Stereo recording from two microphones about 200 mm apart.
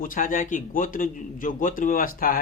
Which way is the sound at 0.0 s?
45° left (ahead or behind).